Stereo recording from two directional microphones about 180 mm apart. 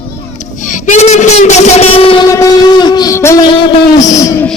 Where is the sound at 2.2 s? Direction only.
20° left (ahead or behind).